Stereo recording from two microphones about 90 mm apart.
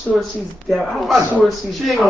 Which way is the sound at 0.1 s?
5° left (ahead or behind).